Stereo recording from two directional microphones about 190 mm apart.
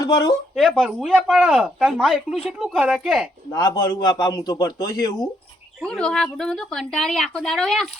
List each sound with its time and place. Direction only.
0.0 s speech: 20° left (ahead or behind)
0.5 s speech: centre (ahead or behind)
3.5 s a man's voice: 20° left (ahead or behind)
5.8 s speech: 5° left (ahead or behind)